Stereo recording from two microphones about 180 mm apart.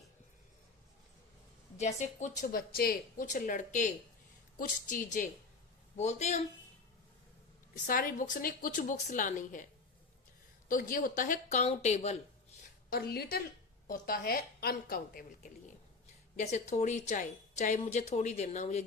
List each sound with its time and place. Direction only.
1.8 s a woman's voice: 40° left (ahead or behind)
7.9 s speech: 50° left (ahead or behind)
10.7 s speech: 50° left (ahead or behind)
12.9 s a woman's voice: 60° left (ahead or behind)
16.3 s a woman's voice: 40° left (ahead or behind)